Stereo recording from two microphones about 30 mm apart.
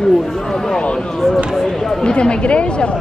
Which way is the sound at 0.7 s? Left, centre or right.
Left.